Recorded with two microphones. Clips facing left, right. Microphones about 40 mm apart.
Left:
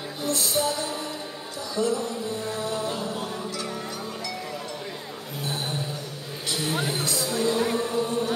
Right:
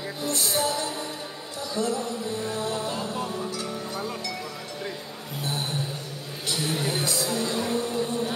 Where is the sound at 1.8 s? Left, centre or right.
Left.